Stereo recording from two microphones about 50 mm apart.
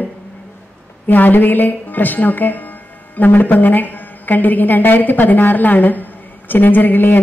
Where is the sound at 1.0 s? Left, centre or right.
Left.